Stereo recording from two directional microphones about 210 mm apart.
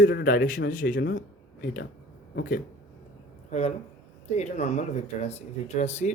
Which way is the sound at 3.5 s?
30° left (ahead or behind).